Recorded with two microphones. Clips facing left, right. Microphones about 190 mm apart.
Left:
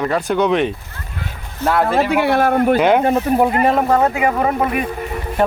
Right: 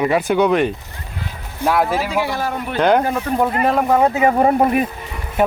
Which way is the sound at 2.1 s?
60° left (ahead or behind).